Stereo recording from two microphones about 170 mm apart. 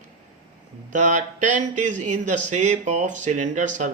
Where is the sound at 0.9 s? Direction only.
45° right (ahead or behind).